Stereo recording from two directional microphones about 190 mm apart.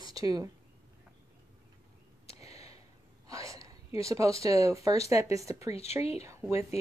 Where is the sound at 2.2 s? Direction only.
35° left (ahead or behind).